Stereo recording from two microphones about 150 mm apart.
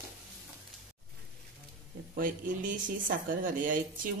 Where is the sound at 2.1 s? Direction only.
65° right (ahead or behind).